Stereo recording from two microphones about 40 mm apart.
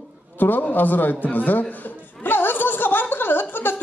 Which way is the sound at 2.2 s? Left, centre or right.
Left.